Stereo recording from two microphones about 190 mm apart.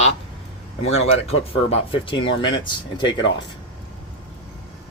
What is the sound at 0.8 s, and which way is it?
Speech, 35° left (ahead or behind).